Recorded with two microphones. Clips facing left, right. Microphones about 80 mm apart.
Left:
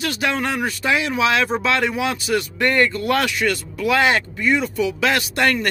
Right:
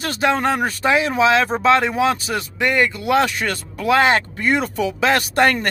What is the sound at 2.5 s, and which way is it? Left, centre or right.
Speech, centre.